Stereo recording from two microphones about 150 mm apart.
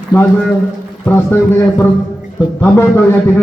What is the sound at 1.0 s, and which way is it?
A man's voice, 15° left (ahead or behind).